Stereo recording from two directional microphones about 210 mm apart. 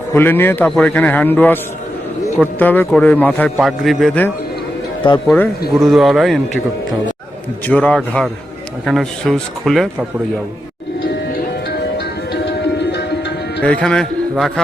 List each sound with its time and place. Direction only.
0.1 s a man's voice: 10° left (ahead or behind)
5.3 s speech: centre (ahead or behind)
7.7 s speech: 5° left (ahead or behind)
11.9 s tabla: 50° left (ahead or behind)
13.6 s speech: 5° left (ahead or behind)